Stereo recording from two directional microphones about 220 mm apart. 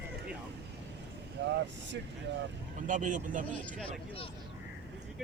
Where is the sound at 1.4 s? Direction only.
50° right (ahead or behind).